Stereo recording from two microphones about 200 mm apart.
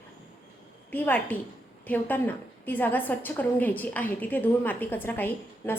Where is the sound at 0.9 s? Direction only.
10° left (ahead or behind).